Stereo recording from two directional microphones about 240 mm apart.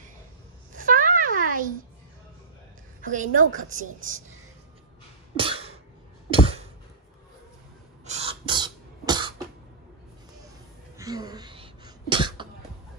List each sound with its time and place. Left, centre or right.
0.7 s a sound: right
3.0 s a woman's voice: right
5.3 s cough: right
6.3 s a sound: right
8.0 s cough: right
11.0 s cough: centre